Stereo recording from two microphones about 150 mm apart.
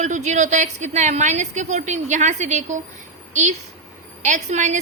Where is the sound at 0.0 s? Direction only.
50° right (ahead or behind).